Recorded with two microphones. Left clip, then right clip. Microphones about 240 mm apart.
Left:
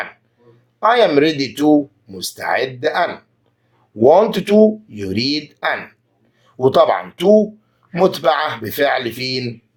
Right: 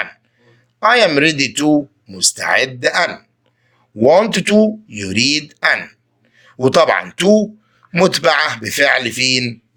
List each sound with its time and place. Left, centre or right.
0.8 s speech: right